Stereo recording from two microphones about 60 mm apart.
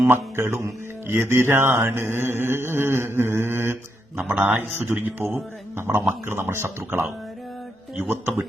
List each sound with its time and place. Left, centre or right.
0.1 s speech: right
1.0 s mantra: right